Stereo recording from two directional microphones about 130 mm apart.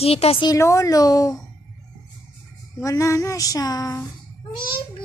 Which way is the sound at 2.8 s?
25° left (ahead or behind).